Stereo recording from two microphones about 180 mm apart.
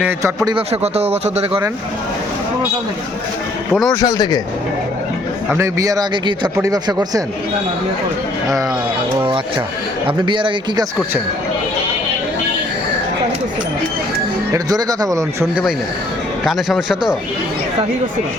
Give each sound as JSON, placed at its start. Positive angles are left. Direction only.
{"t": 0.0, "sound": "a man's voice", "side_deg": -15}
{"t": 0.4, "sound": "speech", "side_deg": -35}
{"t": 3.7, "sound": "speech", "side_deg": 0}
{"t": 4.0, "sound": "speech", "side_deg": 20}
{"t": 5.5, "sound": "speech", "side_deg": -20}
{"t": 10.2, "sound": "speech", "side_deg": -25}
{"t": 14.5, "sound": "speech", "side_deg": -20}
{"t": 16.4, "sound": "a man's voice", "side_deg": 0}